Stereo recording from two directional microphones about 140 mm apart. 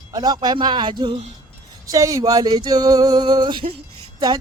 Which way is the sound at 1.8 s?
25° right (ahead or behind).